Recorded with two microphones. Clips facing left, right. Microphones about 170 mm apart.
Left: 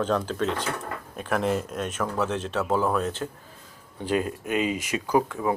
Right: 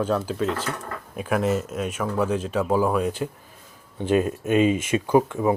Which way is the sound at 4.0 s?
25° right (ahead or behind).